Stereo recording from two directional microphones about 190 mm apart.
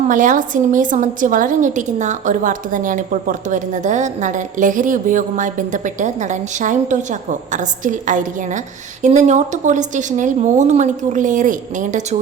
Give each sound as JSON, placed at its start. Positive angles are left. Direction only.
{"t": 0.1, "sound": "a woman's voice", "side_deg": -45}